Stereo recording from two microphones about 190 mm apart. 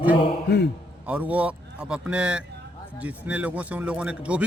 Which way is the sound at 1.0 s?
10° right (ahead or behind).